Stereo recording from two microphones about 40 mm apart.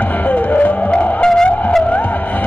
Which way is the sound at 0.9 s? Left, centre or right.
Centre.